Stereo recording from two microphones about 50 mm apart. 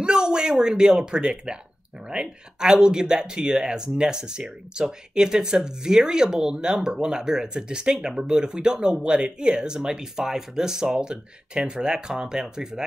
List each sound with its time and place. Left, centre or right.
0.0 s speech: centre